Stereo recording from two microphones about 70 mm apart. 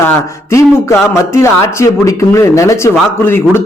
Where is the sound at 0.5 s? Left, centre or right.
Left.